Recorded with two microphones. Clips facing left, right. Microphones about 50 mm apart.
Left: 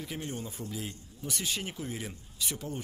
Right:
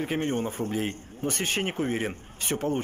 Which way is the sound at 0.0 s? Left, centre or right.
Right.